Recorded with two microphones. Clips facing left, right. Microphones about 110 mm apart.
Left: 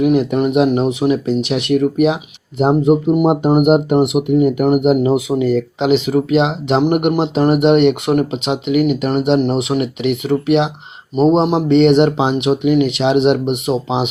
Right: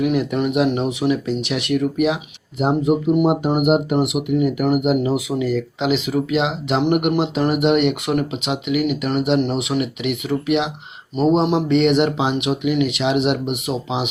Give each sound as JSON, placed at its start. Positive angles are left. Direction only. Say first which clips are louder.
{"t": 0.0, "sound": "speech", "louder": "left 5 dB", "side_deg": 30}
{"t": 0.8, "sound": "speech", "louder": "left 4 dB", "side_deg": 20}